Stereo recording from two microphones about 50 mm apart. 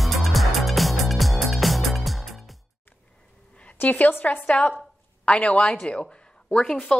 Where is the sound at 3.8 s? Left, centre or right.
Left.